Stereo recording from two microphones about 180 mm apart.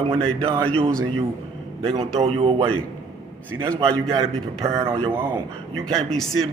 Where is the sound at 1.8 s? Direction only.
25° right (ahead or behind).